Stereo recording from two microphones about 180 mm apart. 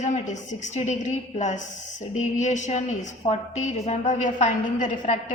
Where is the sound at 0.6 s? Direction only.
40° left (ahead or behind).